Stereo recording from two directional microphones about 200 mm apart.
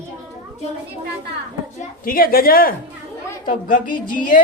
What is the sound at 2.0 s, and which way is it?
A woman's voice, 45° left (ahead or behind).